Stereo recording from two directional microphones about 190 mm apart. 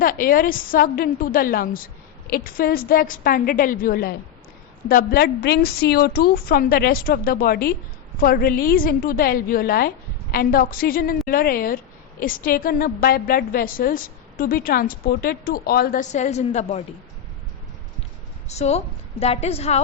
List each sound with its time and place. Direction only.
0.0 s a woman's voice: 50° left (ahead or behind)
18.4 s a woman's voice: 35° left (ahead or behind)